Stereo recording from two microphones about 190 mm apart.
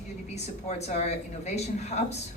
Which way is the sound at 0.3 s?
35° left (ahead or behind).